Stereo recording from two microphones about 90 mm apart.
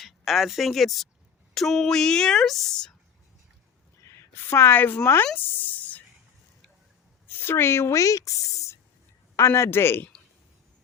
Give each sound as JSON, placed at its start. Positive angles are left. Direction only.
{"t": 0.0, "sound": "a woman's voice", "side_deg": 0}
{"t": 4.0, "sound": "a woman's voice", "side_deg": 30}
{"t": 7.3, "sound": "speech", "side_deg": 25}